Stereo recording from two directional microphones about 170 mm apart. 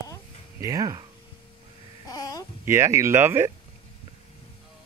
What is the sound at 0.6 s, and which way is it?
Speech, 20° right (ahead or behind).